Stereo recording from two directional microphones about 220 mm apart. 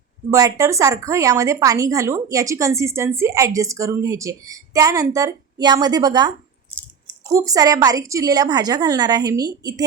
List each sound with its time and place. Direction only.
0.3 s speech: 15° right (ahead or behind)